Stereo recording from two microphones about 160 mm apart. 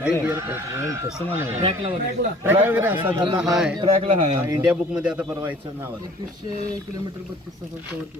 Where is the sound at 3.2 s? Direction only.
30° right (ahead or behind).